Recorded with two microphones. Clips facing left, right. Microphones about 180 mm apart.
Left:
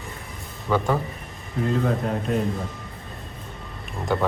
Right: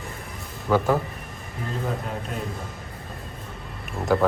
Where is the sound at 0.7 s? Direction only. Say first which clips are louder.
Right 2 dB; 5° right (ahead or behind).